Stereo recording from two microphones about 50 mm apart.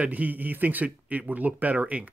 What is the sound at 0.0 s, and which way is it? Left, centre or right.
Speech, right.